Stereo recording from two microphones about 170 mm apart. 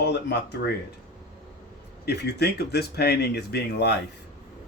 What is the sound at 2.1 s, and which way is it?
Speech, 75° left (ahead or behind).